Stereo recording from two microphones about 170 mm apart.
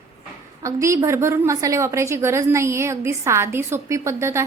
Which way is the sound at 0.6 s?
15° right (ahead or behind).